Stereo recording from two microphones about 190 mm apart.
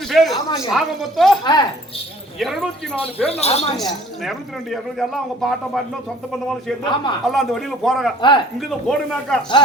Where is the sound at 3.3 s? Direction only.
35° left (ahead or behind).